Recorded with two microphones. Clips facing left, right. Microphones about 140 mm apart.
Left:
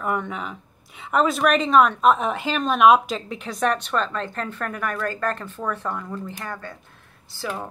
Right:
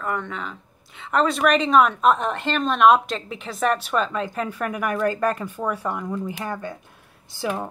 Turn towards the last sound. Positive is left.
turn(degrees=-15)  # may be behind; listen again after turning